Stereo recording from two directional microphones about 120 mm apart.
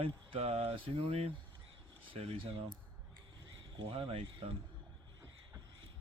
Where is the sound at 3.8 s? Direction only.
50° right (ahead or behind).